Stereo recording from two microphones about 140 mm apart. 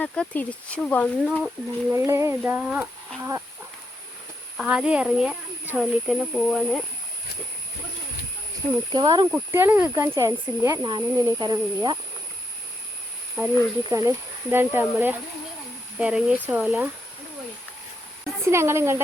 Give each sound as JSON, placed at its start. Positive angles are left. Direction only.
{"t": 0.0, "sound": "speech", "side_deg": 10}
{"t": 1.9, "sound": "speech", "side_deg": -20}
{"t": 3.2, "sound": "speech", "side_deg": -20}
{"t": 4.5, "sound": "speech", "side_deg": -5}
{"t": 8.9, "sound": "speech", "side_deg": -30}
{"t": 9.5, "sound": "speech", "side_deg": -15}
{"t": 13.4, "sound": "speech", "side_deg": -15}
{"t": 18.4, "sound": "speech", "side_deg": -20}